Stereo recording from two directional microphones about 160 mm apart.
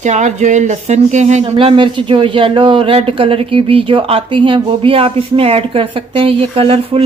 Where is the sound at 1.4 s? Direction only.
30° right (ahead or behind).